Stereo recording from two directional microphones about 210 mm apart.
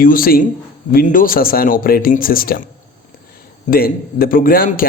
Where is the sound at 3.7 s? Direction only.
45° left (ahead or behind).